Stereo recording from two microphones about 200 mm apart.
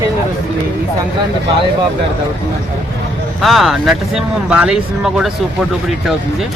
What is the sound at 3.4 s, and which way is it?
Speech, centre (ahead or behind).